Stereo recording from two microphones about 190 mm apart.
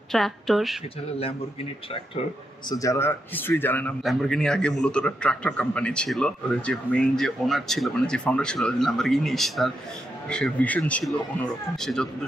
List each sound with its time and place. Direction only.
0.1 s a man's voice: centre (ahead or behind)
1.9 s speech: 30° left (ahead or behind)
2.7 s a man's voice: 15° left (ahead or behind)